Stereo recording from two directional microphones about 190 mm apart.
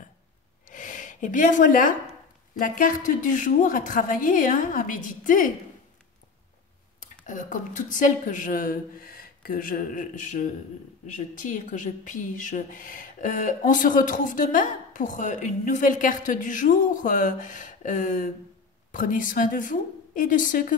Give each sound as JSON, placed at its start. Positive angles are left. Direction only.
{"t": 0.7, "sound": "gasp", "side_deg": 45}
{"t": 2.6, "sound": "speech", "side_deg": 45}
{"t": 7.0, "sound": "speech", "side_deg": 45}